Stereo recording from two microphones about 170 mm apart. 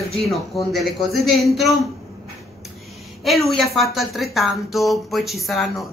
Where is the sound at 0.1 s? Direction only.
Centre (ahead or behind).